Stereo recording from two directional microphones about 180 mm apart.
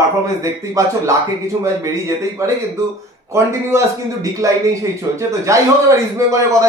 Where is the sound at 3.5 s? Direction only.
15° right (ahead or behind).